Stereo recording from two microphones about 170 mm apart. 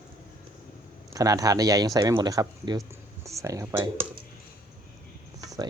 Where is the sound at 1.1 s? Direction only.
20° right (ahead or behind).